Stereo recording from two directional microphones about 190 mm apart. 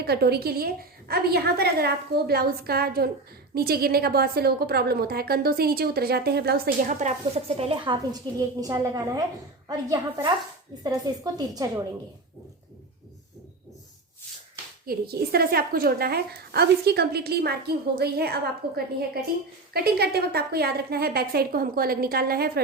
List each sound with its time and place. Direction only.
0.0 s a woman's voice: 55° right (ahead or behind)
6.8 s a woman's voice: 40° right (ahead or behind); by 11.7 s 20° right (ahead or behind)
14.8 s a woman's voice: 55° right (ahead or behind)